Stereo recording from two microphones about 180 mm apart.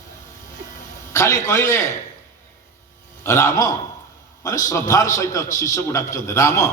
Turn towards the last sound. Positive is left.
turn(degrees=15)  # may be behind; listen again after turning